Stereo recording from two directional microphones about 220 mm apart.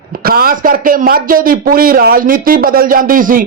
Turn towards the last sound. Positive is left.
turn(degrees=-40)  # may be behind; listen again after turning